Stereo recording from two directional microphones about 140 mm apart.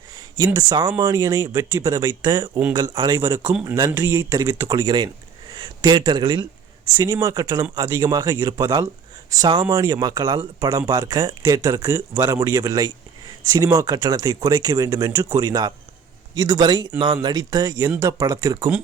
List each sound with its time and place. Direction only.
0.3 s speech: 30° right (ahead or behind)